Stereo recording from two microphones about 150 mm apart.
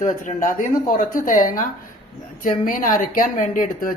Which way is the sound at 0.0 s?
60° left (ahead or behind).